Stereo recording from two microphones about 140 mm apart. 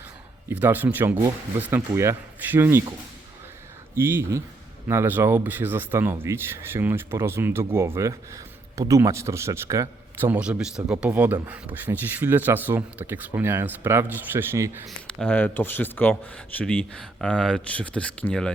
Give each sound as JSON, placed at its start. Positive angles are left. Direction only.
{"t": 0.5, "sound": "speech", "side_deg": -15}
{"t": 3.9, "sound": "speech", "side_deg": -15}
{"t": 14.8, "sound": "speech", "side_deg": 5}